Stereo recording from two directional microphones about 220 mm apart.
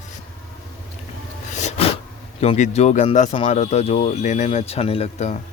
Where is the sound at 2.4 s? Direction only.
30° left (ahead or behind).